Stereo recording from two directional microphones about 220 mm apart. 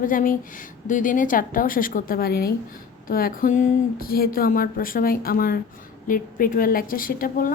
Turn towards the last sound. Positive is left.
turn(degrees=40)  # may be behind; listen again after turning